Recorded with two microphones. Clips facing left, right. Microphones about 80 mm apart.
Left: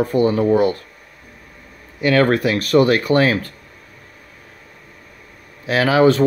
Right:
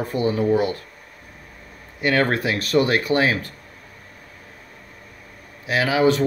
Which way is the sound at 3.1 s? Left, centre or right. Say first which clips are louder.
Left 4 dB; left.